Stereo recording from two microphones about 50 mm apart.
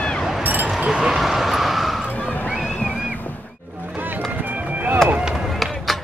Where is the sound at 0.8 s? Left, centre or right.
Centre.